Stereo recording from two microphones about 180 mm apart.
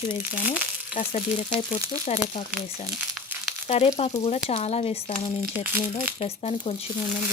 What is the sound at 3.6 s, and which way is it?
Speech, 35° left (ahead or behind).